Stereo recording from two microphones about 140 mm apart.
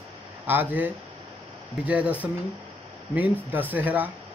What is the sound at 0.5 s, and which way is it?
Speech, 15° right (ahead or behind).